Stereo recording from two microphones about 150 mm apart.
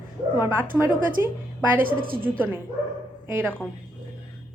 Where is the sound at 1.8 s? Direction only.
70° right (ahead or behind).